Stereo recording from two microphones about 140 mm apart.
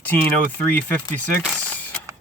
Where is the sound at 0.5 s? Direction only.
10° left (ahead or behind).